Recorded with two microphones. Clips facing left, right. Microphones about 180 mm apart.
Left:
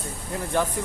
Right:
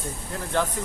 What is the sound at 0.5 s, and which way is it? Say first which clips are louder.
Speech: left 1 dB; 10° left (ahead or behind).